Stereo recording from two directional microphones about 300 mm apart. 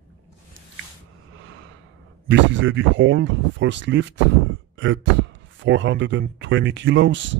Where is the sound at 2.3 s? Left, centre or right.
Right.